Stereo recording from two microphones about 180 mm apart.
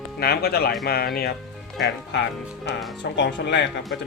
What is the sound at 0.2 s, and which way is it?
Speech, 60° left (ahead or behind).